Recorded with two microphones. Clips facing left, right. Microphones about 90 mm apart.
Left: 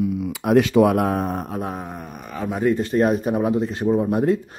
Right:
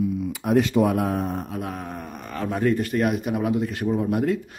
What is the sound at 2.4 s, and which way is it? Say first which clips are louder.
Speech: left 2 dB; 15° left (ahead or behind).